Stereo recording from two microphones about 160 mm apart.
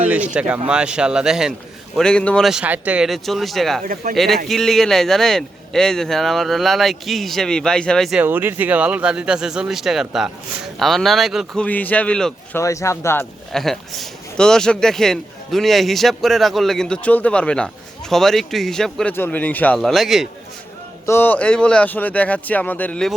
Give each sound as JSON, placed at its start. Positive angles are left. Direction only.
{"t": 0.0, "sound": "speech", "side_deg": -10}
{"t": 8.2, "sound": "speech", "side_deg": -10}
{"t": 12.5, "sound": "speech", "side_deg": 20}
{"t": 13.5, "sound": "speech", "side_deg": 0}
{"t": 21.1, "sound": "speech", "side_deg": 15}